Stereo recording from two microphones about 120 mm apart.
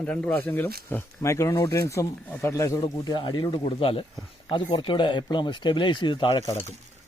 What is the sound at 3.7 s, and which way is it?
Speech, 50° left (ahead or behind).